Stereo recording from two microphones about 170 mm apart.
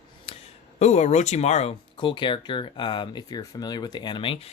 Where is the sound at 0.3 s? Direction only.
35° left (ahead or behind).